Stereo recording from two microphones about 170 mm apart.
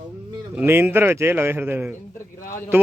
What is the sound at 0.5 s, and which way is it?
A man's voice, 10° right (ahead or behind).